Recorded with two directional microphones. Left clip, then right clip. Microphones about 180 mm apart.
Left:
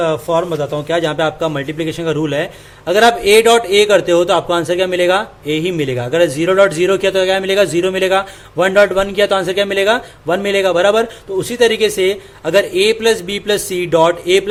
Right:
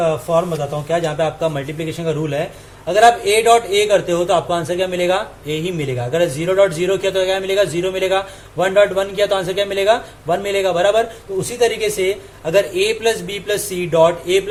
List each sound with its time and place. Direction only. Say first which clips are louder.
0.0 s a man's voice: left 1 dB; 50° left (ahead or behind)